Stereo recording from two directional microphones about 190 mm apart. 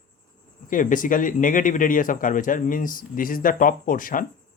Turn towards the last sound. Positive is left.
turn(degrees=45)  # may be behind; listen again after turning